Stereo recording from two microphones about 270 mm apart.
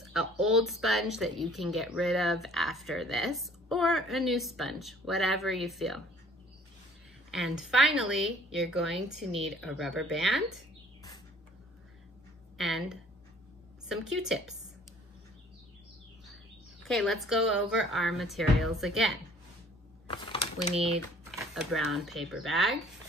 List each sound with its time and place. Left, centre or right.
0.0 s speech: centre
7.2 s speech: centre
12.5 s a woman's voice: centre
13.8 s speech: centre
16.8 s speech: centre
20.1 s a sound: centre
21.4 s speech: centre